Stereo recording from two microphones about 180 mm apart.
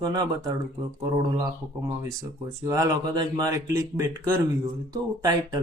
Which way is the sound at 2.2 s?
20° right (ahead or behind).